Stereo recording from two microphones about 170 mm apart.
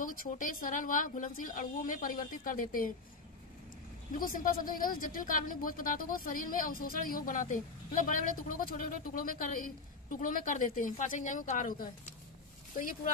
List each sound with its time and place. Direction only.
0.0 s speech: 55° left (ahead or behind)
4.2 s speech: 55° left (ahead or behind)